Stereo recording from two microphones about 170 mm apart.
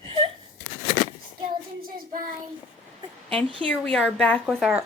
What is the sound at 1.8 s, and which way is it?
Child singing, 55° right (ahead or behind).